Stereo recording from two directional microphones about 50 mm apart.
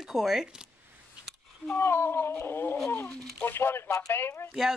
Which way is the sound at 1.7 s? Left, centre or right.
Left.